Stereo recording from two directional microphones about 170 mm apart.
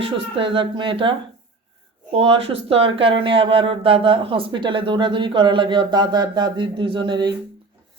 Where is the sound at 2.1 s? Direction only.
35° right (ahead or behind).